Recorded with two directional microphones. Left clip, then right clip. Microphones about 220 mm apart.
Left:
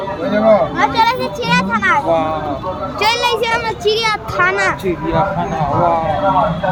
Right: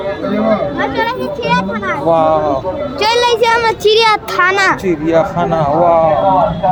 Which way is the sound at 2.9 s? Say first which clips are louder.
Right 3 dB; 25° right (ahead or behind).